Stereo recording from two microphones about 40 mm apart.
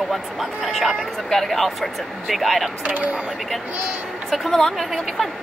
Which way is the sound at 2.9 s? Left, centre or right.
Right.